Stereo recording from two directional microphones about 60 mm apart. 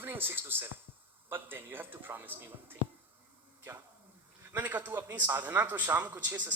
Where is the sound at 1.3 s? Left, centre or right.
Right.